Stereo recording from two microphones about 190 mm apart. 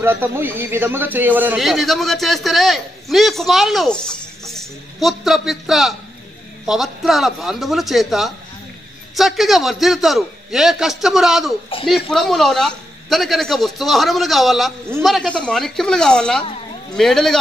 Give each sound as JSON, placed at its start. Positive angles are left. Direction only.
{"t": 0.0, "sound": "a man's voice", "side_deg": -10}